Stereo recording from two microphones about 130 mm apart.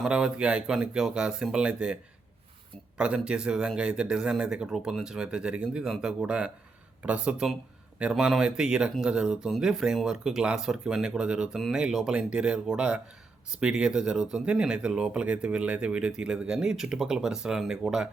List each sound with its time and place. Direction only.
0.0 s speech: 5° right (ahead or behind)
3.0 s speech: 5° right (ahead or behind)